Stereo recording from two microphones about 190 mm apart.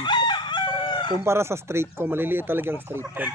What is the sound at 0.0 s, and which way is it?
Chicken, 25° left (ahead or behind).